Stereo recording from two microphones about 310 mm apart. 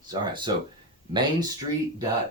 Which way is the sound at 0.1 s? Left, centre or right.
Centre.